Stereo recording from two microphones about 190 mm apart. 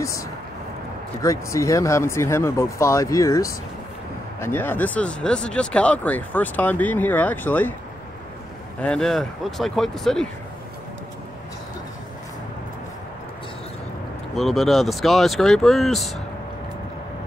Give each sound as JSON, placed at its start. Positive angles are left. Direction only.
{"t": 0.0, "sound": "speech", "side_deg": 15}
{"t": 8.8, "sound": "speech", "side_deg": 5}
{"t": 14.3, "sound": "speech", "side_deg": 0}